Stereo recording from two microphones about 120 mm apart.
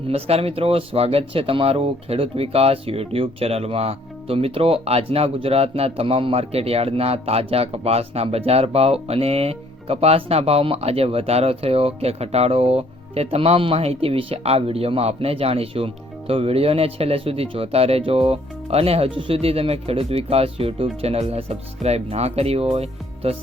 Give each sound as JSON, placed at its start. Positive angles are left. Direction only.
{"t": 0.1, "sound": "speech", "side_deg": -55}